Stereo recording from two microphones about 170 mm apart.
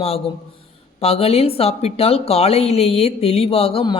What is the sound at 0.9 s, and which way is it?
Speech, 35° left (ahead or behind).